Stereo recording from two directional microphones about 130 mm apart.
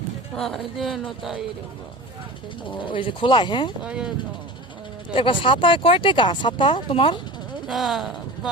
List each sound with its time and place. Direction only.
0.3 s speech: centre (ahead or behind)
2.6 s speech: 40° left (ahead or behind)
3.8 s speech: 5° right (ahead or behind)
5.1 s speech: 40° left (ahead or behind)
7.7 s speech: centre (ahead or behind)